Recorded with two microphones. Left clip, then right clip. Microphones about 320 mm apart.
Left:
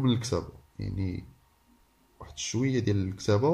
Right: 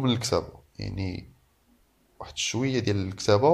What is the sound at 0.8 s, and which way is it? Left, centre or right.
Speech, right.